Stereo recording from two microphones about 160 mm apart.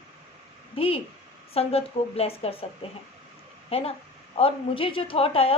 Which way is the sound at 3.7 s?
40° left (ahead or behind).